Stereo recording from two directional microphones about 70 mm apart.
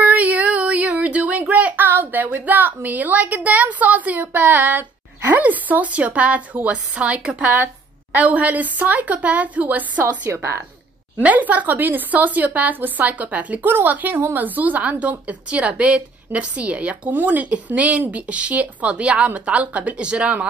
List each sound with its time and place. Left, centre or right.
0.0 s speech: right
10.3 s a woman's voice: right
11.1 s speech: right